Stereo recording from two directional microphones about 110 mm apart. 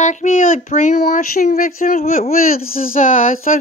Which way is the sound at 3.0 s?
90° left.